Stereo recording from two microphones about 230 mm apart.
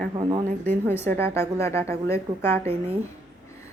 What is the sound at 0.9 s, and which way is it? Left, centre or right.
A woman's voice, centre.